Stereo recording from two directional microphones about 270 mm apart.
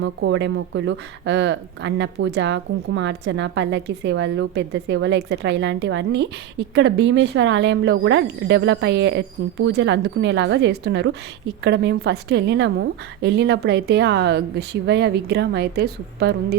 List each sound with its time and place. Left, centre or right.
0.0 s speech: right